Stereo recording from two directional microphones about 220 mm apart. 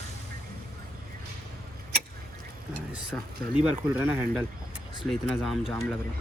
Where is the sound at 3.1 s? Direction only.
5° left (ahead or behind).